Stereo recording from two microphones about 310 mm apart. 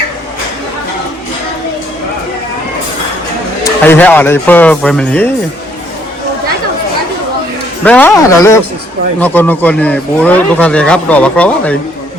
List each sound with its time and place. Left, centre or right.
3.6 s speech: centre
7.9 s speech: centre